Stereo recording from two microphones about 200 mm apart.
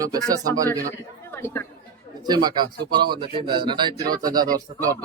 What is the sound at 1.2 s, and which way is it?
Chatter, 10° left (ahead or behind).